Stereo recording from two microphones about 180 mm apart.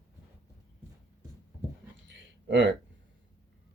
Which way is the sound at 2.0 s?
80° right.